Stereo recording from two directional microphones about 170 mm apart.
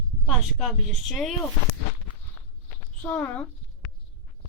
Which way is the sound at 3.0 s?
10° left (ahead or behind).